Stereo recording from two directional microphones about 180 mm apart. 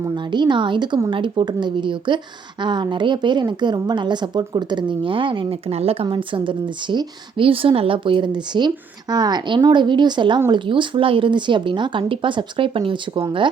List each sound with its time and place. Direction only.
0.2 s a woman's voice: 25° right (ahead or behind)